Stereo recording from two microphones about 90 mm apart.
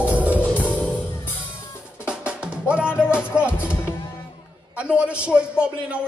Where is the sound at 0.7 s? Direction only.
15° left (ahead or behind).